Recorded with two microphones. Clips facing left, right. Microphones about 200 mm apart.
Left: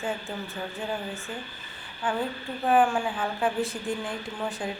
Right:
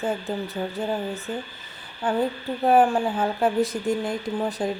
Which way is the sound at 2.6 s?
40° right (ahead or behind).